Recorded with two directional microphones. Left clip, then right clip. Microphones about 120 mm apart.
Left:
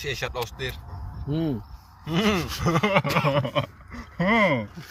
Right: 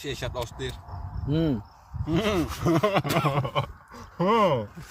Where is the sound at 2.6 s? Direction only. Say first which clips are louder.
Left 2 dB; 45° right (ahead or behind).